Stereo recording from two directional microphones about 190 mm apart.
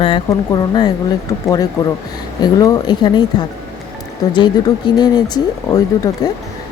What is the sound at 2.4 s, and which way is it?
Speech, 20° left (ahead or behind).